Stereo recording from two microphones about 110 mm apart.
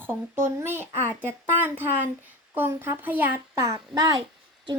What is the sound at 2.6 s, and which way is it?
A child's voice, 20° right (ahead or behind).